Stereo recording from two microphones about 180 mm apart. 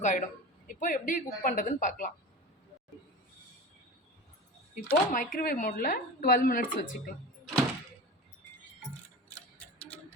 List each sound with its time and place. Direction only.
0.0 s a woman's voice: 45° left (ahead or behind)
4.7 s a woman's voice: 50° left (ahead or behind)